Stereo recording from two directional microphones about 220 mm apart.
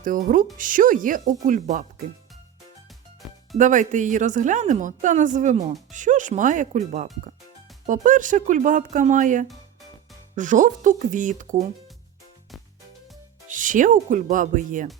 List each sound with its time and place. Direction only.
0.0 s a woman's voice: 40° right (ahead or behind)
3.6 s a woman's voice: 35° right (ahead or behind)
13.5 s a woman's voice: 35° right (ahead or behind)